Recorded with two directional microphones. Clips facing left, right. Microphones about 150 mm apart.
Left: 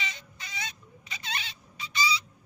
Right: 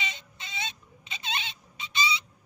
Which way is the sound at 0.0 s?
25° right (ahead or behind).